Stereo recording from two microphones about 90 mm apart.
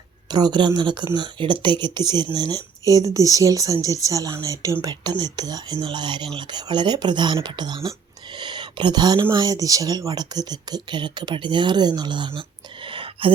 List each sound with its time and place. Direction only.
0.3 s a woman's voice: 55° right (ahead or behind); by 4.8 s 35° right (ahead or behind)
4.8 s speech: 50° right (ahead or behind)
5.7 s speech: 60° right (ahead or behind); by 13.3 s 80° right